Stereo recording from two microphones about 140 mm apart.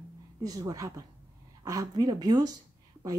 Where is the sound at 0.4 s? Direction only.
25° right (ahead or behind).